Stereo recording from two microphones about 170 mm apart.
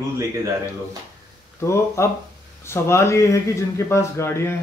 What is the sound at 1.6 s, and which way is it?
Speech, 15° left (ahead or behind).